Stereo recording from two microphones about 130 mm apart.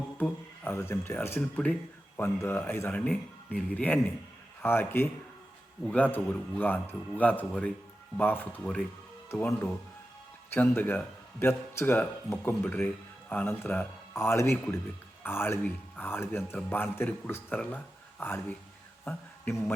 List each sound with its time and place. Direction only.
0.2 s a man's voice: 20° left (ahead or behind)